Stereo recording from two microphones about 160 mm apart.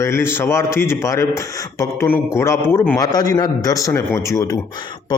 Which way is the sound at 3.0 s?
25° left (ahead or behind).